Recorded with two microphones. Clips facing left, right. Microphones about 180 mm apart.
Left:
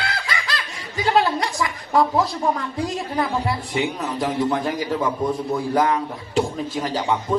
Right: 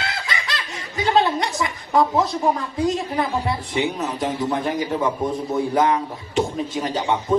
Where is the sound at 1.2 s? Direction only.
20° right (ahead or behind).